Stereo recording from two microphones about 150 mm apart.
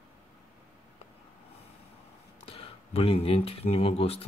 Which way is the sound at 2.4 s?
40° left (ahead or behind).